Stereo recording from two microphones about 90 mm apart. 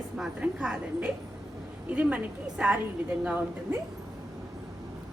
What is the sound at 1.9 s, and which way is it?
Speech, 15° right (ahead or behind).